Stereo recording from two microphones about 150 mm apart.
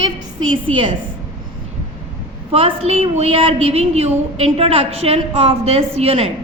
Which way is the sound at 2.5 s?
40° right (ahead or behind).